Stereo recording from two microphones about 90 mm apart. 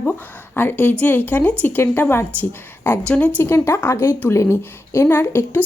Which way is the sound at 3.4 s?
30° left (ahead or behind).